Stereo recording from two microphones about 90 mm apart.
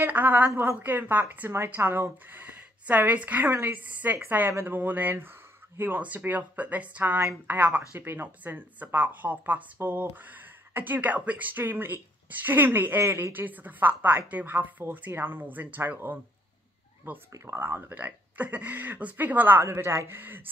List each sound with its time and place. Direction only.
0.0 s a woman's voice: 20° right (ahead or behind)